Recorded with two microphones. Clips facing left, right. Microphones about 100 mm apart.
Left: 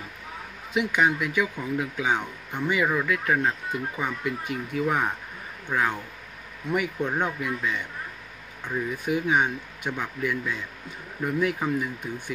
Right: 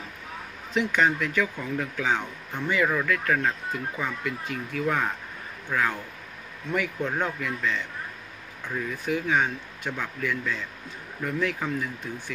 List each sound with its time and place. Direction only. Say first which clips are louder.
0.7 s speech: even; 10° left (ahead or behind)